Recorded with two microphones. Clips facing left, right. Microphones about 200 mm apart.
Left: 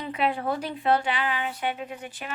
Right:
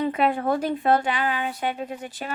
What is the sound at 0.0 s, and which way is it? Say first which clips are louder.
Speech: right 5 dB; 45° right (ahead or behind).